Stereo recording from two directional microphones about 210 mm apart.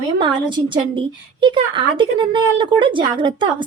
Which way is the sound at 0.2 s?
20° right (ahead or behind).